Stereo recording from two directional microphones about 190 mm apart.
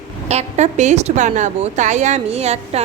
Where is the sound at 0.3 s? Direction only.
35° right (ahead or behind).